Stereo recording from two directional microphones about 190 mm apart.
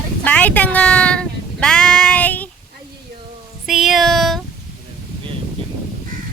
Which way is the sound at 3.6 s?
Centre (ahead or behind).